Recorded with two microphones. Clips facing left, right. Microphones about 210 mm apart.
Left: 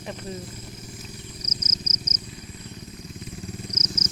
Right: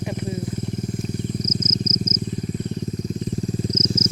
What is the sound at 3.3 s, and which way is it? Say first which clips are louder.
Vehicle: right 10 dB; 35° right (ahead or behind).